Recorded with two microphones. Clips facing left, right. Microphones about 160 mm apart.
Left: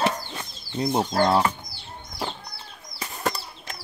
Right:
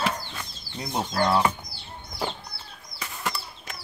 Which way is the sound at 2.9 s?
40° left (ahead or behind).